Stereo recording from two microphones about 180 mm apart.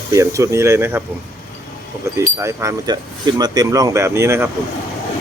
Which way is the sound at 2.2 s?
15° right (ahead or behind).